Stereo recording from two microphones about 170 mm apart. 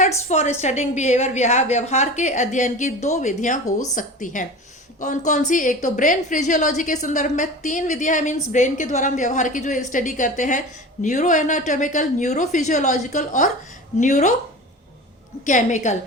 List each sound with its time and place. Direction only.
0.3 s a woman's voice: 45° left (ahead or behind)
15.4 s a woman's voice: 45° left (ahead or behind)